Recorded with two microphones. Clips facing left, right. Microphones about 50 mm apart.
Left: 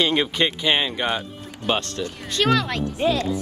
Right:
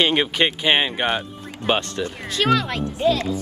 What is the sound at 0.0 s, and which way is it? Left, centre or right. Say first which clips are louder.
Speech: right 2 dB; right.